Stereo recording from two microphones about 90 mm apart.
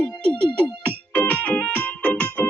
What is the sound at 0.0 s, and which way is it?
Music, 15° left (ahead or behind).